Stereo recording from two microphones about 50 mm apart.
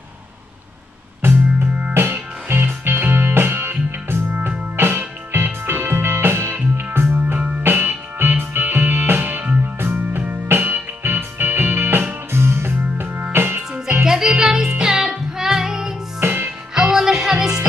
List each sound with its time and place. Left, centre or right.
1.2 s music: right
7.3 s music: right
7.6 s music: right
13.6 s music: right
16.2 s music: right
16.9 s music: centre